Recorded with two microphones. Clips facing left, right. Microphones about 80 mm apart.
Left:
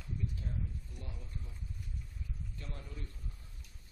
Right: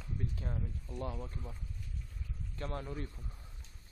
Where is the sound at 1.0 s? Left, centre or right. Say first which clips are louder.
Right 11 dB; right.